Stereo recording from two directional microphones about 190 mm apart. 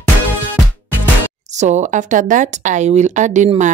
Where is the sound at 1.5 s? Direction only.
40° right (ahead or behind).